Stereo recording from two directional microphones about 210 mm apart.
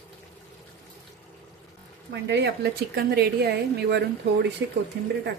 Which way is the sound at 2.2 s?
55° right (ahead or behind).